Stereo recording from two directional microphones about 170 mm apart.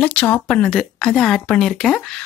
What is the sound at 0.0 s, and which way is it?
Speech, 5° left (ahead or behind).